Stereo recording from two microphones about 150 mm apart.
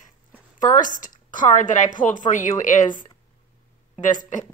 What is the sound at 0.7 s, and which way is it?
Speech, 60° left (ahead or behind).